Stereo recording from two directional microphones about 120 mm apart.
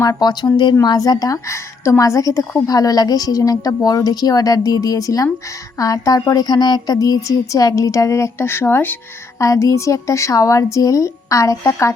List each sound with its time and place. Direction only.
0.0 s speech: 30° left (ahead or behind)